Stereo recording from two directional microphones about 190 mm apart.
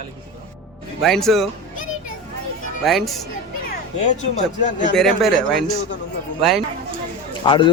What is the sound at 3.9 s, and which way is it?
Speech, 35° left (ahead or behind).